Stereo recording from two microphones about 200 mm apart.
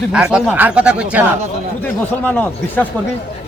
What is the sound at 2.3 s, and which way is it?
Speech, 5° left (ahead or behind).